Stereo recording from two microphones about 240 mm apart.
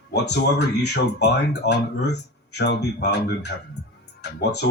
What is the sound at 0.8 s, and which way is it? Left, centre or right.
Speech, left.